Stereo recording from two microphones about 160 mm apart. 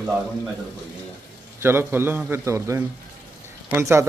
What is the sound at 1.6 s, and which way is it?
A man's voice, 15° right (ahead or behind).